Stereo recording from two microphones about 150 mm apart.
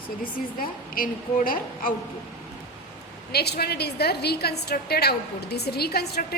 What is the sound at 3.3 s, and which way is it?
A woman's voice, 90° left.